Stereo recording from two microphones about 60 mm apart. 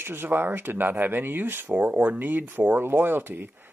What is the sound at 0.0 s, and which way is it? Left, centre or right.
Speech, right.